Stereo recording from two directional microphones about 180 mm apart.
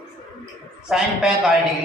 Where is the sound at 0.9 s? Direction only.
5° right (ahead or behind).